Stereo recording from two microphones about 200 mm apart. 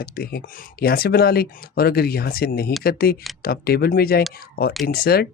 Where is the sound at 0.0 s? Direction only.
50° left (ahead or behind).